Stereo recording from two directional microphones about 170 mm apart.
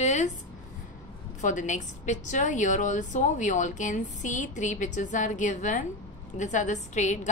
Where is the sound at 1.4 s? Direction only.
45° left (ahead or behind).